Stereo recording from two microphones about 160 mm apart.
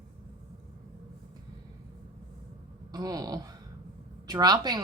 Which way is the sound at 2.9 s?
25° right (ahead or behind).